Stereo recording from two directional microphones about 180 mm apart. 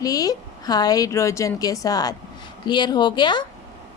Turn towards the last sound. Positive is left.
turn(degrees=25)  # may be behind; listen again after turning